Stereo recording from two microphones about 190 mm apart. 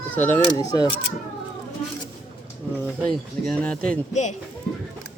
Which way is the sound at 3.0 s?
5° left (ahead or behind).